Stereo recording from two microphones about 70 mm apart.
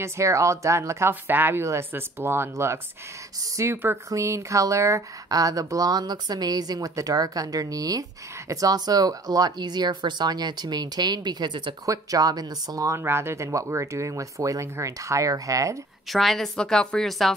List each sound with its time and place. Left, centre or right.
0.0 s speech: right
1.2 s speech: right
1.6 s speech: right
5.3 s speech: right
11.8 s speech: right
13.0 s speech: right
16.1 s a woman's voice: centre